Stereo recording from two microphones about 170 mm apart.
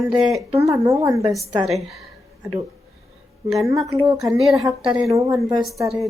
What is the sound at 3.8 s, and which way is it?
A woman's voice, 20° right (ahead or behind).